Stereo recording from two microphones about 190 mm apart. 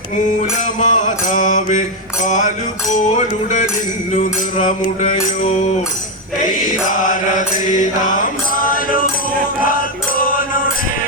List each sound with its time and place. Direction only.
0.8 s mantra: 40° left (ahead or behind)
5.0 s mantra: 40° left (ahead or behind)
6.9 s mantra: 45° left (ahead or behind)
8.5 s music: 45° left (ahead or behind)